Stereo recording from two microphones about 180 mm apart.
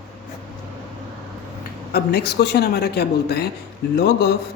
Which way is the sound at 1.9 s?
60° left (ahead or behind).